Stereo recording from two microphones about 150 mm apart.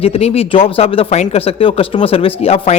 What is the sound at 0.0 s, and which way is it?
Speech, 40° left (ahead or behind).